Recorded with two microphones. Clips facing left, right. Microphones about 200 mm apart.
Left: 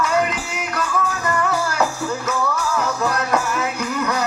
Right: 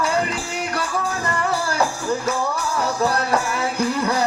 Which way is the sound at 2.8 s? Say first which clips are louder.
Right 4 dB; 35° right (ahead or behind).